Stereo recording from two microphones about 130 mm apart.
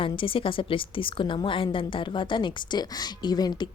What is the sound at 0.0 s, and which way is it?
A woman's voice, 45° left (ahead or behind).